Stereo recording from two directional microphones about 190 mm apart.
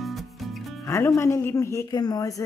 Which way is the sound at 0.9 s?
15° left (ahead or behind).